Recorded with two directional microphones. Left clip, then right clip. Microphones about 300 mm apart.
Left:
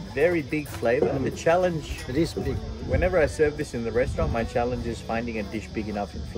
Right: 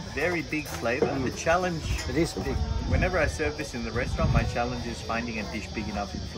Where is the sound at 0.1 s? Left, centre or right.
Left.